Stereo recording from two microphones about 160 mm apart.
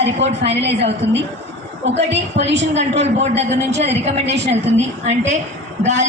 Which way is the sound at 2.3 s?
90° right.